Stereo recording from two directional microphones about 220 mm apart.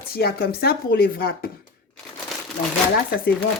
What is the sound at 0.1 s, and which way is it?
Speech, 45° left (ahead or behind).